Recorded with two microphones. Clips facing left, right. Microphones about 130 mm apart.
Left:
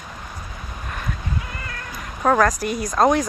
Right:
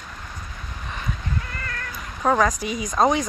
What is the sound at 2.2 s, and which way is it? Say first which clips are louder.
Speech: left 2 dB; centre (ahead or behind).